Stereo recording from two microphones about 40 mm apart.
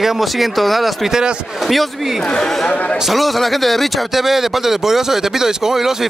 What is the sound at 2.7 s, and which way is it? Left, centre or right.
Speech, left.